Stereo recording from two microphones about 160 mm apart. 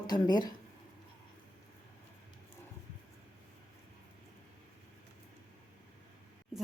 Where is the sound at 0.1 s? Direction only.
25° left (ahead or behind).